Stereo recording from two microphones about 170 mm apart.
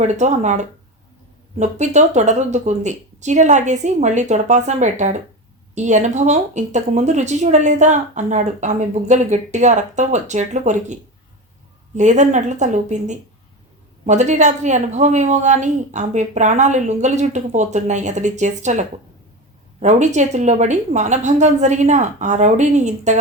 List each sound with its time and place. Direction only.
0.0 s speech: 45° right (ahead or behind)